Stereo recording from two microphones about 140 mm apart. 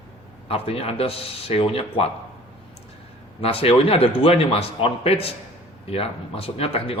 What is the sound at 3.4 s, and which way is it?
Speech, 45° left (ahead or behind).